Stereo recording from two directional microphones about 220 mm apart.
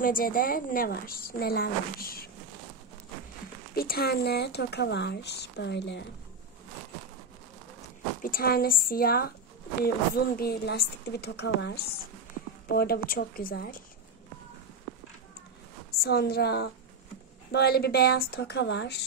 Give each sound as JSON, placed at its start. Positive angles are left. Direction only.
{"t": 0.0, "sound": "a woman's voice", "side_deg": 40}
{"t": 3.7, "sound": "speech", "side_deg": 45}
{"t": 8.2, "sound": "speech", "side_deg": 40}
{"t": 16.0, "sound": "speech", "side_deg": 45}